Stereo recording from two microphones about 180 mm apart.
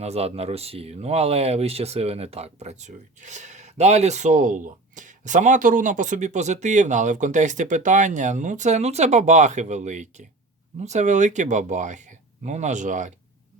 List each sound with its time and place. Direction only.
0.0 s speech: 35° right (ahead or behind)